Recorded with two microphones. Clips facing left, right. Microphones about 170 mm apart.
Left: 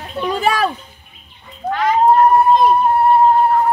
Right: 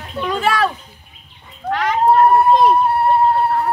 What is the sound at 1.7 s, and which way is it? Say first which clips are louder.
Speech: left 2 dB; 75° right (ahead or behind).